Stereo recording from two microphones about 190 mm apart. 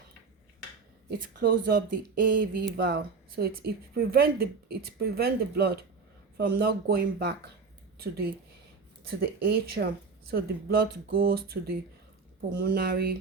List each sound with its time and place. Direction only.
1.4 s speech: 50° right (ahead or behind)